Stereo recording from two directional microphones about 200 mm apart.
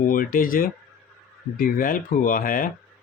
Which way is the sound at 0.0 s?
45° left (ahead or behind).